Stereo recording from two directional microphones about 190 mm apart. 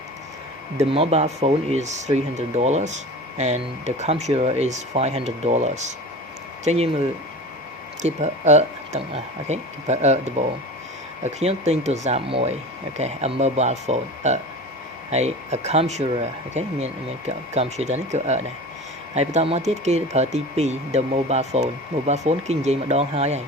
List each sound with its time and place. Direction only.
0.8 s speech: 30° right (ahead or behind)